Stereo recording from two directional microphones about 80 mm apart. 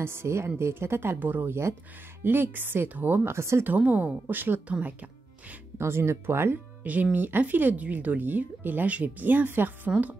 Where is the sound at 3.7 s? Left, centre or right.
Right.